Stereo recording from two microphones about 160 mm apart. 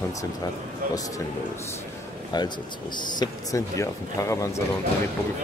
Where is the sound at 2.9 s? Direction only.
25° left (ahead or behind).